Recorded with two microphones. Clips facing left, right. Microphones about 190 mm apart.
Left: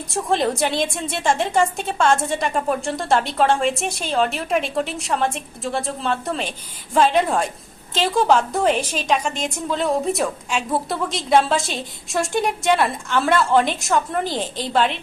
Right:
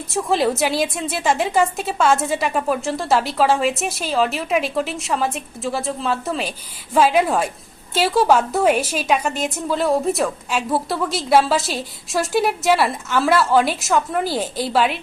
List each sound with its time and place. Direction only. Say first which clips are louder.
0.1 s a woman's voice: right 2 dB; 5° right (ahead or behind)